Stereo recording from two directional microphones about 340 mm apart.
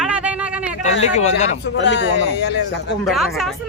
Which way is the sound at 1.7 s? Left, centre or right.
Left.